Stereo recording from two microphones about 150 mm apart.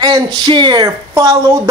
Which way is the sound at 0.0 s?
30° right (ahead or behind).